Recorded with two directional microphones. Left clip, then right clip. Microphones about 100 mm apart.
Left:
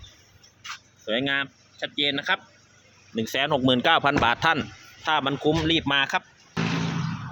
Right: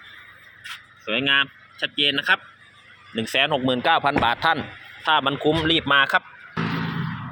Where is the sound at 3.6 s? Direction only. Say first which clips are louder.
Right 1 dB; 45° left (ahead or behind).